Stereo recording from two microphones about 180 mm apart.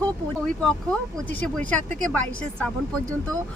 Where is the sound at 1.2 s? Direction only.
10° left (ahead or behind).